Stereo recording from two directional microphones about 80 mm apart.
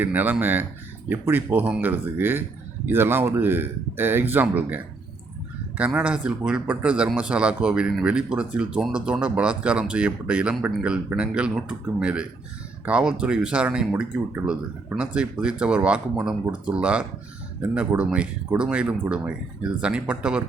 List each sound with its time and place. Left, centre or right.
0.0 s speech: right